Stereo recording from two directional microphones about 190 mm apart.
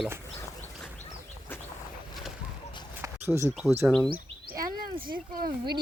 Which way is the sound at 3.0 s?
15° right (ahead or behind).